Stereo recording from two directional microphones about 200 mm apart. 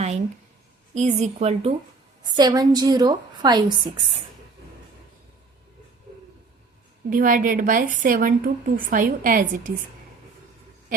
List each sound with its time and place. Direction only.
0.9 s a woman's voice: 35° right (ahead or behind)
2.2 s a woman's voice: 20° right (ahead or behind)
7.1 s a woman's voice: 45° right (ahead or behind)